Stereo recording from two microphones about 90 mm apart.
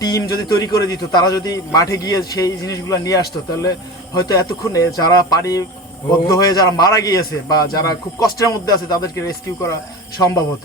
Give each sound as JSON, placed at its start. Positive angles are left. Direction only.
{"t": 0.0, "sound": "a man's voice", "side_deg": 45}